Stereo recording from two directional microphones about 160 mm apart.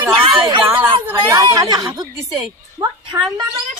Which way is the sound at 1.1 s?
20° right (ahead or behind).